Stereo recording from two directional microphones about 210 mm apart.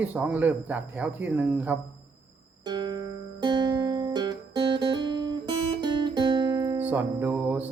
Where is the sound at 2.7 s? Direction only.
20° right (ahead or behind).